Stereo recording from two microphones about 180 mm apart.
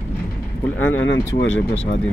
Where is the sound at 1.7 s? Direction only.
40° left (ahead or behind).